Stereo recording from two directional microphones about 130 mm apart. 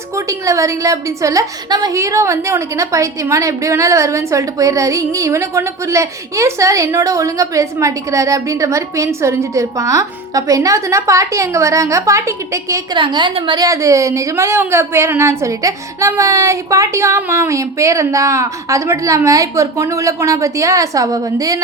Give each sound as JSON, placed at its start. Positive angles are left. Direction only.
{"t": 0.2, "sound": "a woman's voice", "side_deg": -25}
{"t": 13.0, "sound": "a woman's voice", "side_deg": -40}
{"t": 13.7, "sound": "a woman's voice", "side_deg": -25}